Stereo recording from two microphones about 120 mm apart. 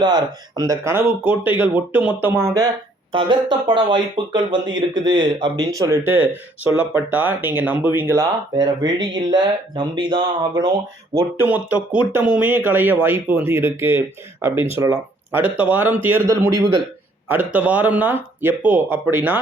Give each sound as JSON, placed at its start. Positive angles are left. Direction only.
{"t": 0.0, "sound": "speech", "side_deg": -35}
{"t": 1.2, "sound": "speech", "side_deg": -10}
{"t": 3.1, "sound": "speech", "side_deg": -45}
{"t": 6.1, "sound": "speech", "side_deg": -20}
{"t": 8.5, "sound": "speech", "side_deg": -35}
{"t": 11.1, "sound": "speech", "side_deg": -20}